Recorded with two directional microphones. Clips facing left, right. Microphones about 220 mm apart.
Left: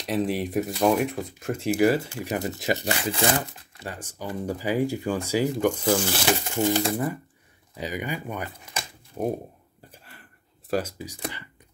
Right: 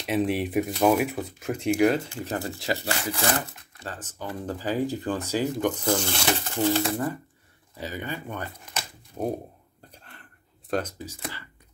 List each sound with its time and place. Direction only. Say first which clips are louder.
0.0 s speech: right 1 dB; centre (ahead or behind)
2.2 s speech: left 3 dB; 20° left (ahead or behind)
9.8 s a sound: even; 5° left (ahead or behind)
10.7 s speech: left 1 dB; 10° left (ahead or behind)